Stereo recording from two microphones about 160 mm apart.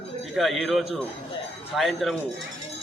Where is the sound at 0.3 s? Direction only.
Centre (ahead or behind).